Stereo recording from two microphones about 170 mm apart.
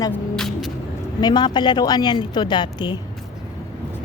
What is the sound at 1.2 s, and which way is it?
A woman's voice, 25° left (ahead or behind).